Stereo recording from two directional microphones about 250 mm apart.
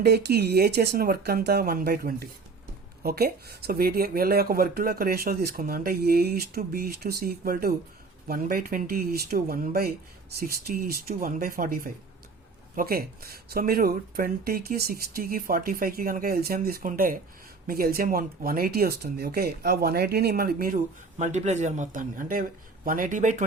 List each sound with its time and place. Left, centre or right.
0.0 s speech: right